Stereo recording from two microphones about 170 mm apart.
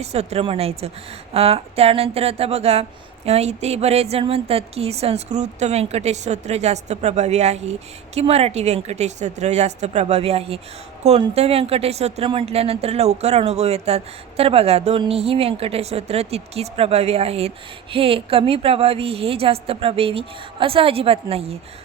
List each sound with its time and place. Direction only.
0.0 s speech: 40° right (ahead or behind)